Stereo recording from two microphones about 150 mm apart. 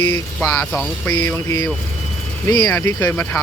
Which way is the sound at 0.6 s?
5° left (ahead or behind).